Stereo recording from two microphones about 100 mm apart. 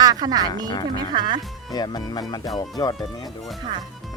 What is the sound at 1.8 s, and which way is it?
Speech, 45° left (ahead or behind).